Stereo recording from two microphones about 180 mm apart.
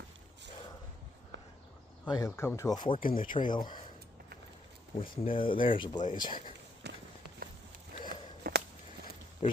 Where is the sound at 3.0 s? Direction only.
50° left (ahead or behind).